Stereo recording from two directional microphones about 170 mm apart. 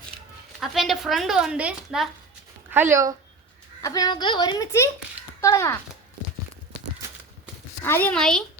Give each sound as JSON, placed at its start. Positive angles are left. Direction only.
{"t": 0.6, "sound": "a woman's voice", "side_deg": 0}
{"t": 3.8, "sound": "a child's voice", "side_deg": 20}
{"t": 7.9, "sound": "a woman's voice", "side_deg": 10}